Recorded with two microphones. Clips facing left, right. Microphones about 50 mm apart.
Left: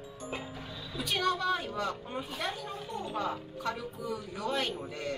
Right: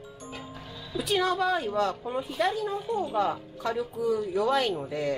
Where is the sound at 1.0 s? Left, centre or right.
Right.